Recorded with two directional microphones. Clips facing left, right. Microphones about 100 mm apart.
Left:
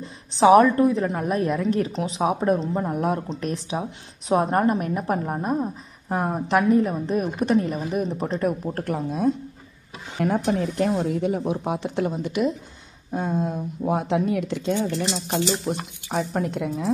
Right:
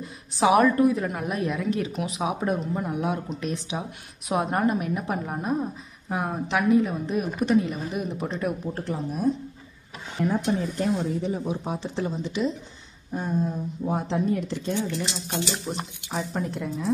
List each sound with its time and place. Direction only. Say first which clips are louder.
0.0 s speech: left 5 dB; 30° left (ahead or behind); by 12.4 s 60° left (ahead or behind)
13.1 s speech: left 2 dB; 90° left
16.1 s speech: left 5 dB; 75° left (ahead or behind)